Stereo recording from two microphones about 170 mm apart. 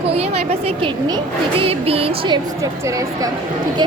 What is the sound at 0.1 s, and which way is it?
Music, 35° right (ahead or behind).